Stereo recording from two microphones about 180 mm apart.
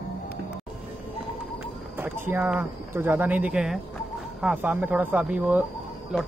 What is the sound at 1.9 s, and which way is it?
Speech, 10° right (ahead or behind).